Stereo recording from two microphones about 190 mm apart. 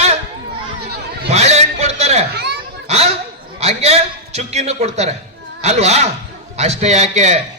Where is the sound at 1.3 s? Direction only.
35° right (ahead or behind).